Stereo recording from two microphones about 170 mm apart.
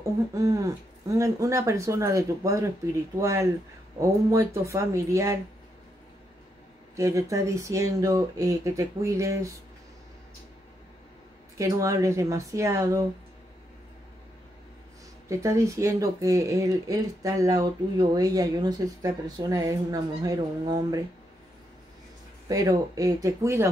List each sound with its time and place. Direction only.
0.3 s speech: 20° right (ahead or behind)
7.0 s speech: 20° right (ahead or behind)
11.5 s speech: 20° right (ahead or behind)
15.2 s speech: 20° right (ahead or behind)
22.5 s speech: 20° right (ahead or behind)